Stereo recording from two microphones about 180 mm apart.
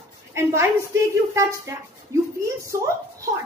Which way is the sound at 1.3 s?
15° right (ahead or behind).